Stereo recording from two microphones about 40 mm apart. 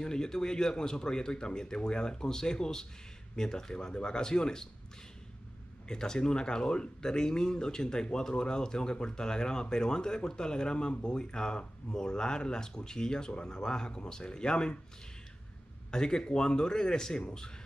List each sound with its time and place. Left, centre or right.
0.0 s a man's voice: centre
5.9 s speech: centre
15.9 s a man's voice: centre